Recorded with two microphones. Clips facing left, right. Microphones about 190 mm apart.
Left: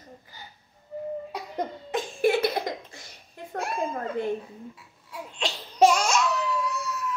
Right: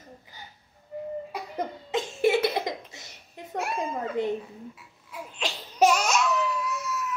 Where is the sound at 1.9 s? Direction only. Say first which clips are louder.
Even; 25° right (ahead or behind).